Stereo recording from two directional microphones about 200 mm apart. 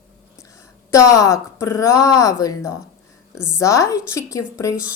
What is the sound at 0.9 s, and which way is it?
A woman's voice, 15° left (ahead or behind).